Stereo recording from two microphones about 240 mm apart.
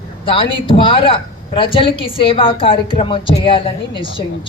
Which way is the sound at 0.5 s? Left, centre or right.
Left.